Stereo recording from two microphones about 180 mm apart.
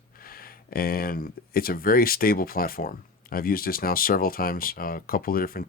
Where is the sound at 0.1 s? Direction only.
55° left (ahead or behind).